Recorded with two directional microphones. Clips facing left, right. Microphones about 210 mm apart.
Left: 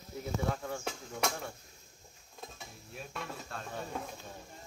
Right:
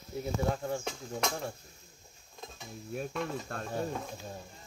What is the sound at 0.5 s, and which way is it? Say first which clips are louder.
Speech: right 4 dB; 30° right (ahead or behind).